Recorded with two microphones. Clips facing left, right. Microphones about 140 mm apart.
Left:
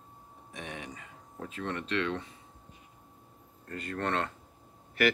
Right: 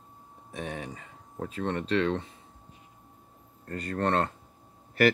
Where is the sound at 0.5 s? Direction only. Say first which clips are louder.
Right 5 dB; 35° right (ahead or behind).